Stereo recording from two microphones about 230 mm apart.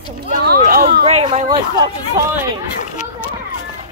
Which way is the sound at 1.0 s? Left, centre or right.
Right.